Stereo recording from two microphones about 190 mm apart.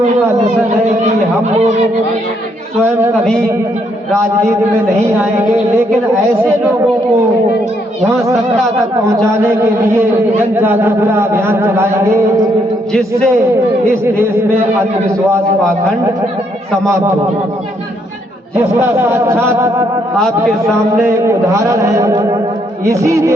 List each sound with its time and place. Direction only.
9.0 s a man's voice: 15° right (ahead or behind)
12.9 s speech: 5° left (ahead or behind)
18.5 s a man's voice: 15° right (ahead or behind)
21.0 s a man's voice: 15° right (ahead or behind)